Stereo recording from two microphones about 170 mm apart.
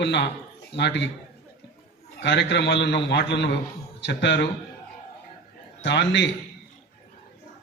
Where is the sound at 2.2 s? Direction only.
90° left.